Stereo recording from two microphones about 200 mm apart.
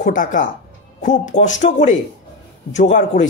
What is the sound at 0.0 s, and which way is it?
Speech, 40° left (ahead or behind).